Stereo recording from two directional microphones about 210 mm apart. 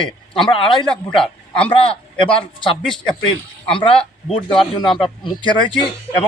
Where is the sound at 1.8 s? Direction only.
25° left (ahead or behind).